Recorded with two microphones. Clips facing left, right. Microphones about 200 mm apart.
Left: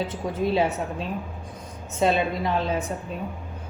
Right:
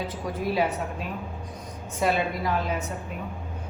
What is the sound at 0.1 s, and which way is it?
A woman's voice, 25° left (ahead or behind).